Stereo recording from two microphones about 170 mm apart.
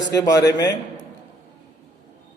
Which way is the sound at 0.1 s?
20° left (ahead or behind).